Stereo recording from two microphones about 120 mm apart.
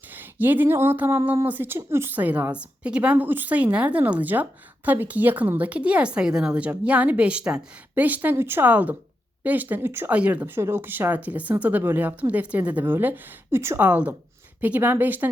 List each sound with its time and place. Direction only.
0.1 s a woman's voice: 15° right (ahead or behind)